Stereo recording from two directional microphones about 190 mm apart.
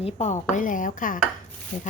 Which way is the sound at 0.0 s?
35° left (ahead or behind).